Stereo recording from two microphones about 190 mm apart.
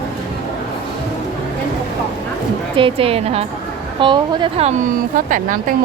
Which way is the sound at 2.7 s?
30° right (ahead or behind).